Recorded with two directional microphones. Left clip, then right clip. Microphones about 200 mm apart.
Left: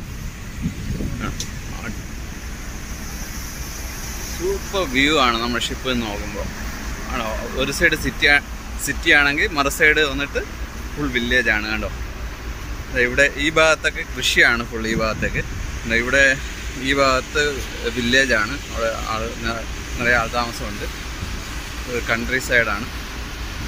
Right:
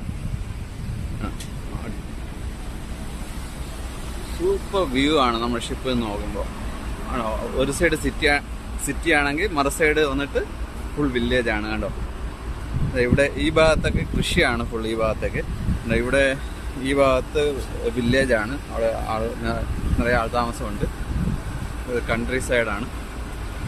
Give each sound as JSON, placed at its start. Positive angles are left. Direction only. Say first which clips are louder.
{"t": 4.7, "sound": "speech", "louder": "left 4 dB", "side_deg": -10}
{"t": 7.2, "sound": "speech", "louder": "even", "side_deg": -15}
{"t": 12.9, "sound": "speech", "louder": "left 3 dB", "side_deg": -10}
{"t": 22.0, "sound": "speech", "louder": "left 4 dB", "side_deg": -10}